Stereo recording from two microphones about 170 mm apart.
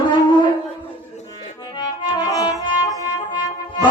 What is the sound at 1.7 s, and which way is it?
Accordion, 25° left (ahead or behind).